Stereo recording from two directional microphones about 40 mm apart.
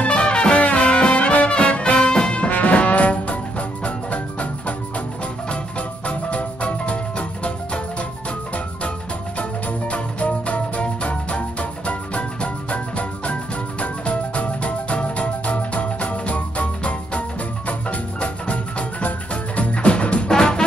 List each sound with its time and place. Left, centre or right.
0.0 s music: left
0.6 s music: left
2.5 s music: left
9.4 s music: left
20.2 s music: centre